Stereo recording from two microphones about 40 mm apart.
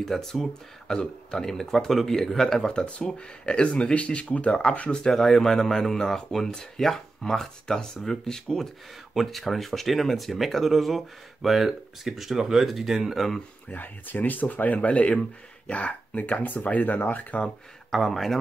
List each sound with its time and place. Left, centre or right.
0.0 s speech: centre
2.7 s speech: left
4.5 s speech: left
5.1 s speech: centre
9.1 s speech: centre
13.7 s speech: left
17.9 s speech: centre